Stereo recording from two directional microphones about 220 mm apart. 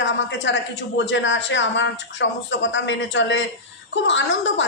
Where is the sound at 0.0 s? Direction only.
55° left (ahead or behind).